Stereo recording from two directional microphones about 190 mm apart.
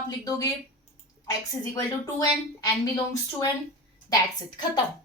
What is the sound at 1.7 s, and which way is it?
A woman's voice, 15° left (ahead or behind).